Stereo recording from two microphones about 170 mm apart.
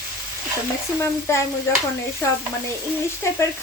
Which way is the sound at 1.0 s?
15° left (ahead or behind).